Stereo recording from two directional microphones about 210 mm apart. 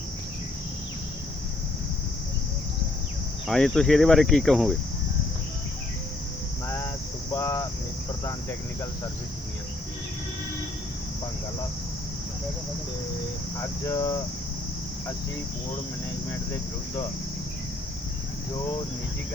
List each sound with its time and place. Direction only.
3.4 s cricket: centre (ahead or behind)
6.7 s a sound: 10° left (ahead or behind)
7.3 s cricket: 15° left (ahead or behind)
13.6 s speech: 15° left (ahead or behind)